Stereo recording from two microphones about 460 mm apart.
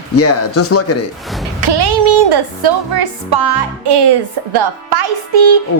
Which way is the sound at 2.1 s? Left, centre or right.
Right.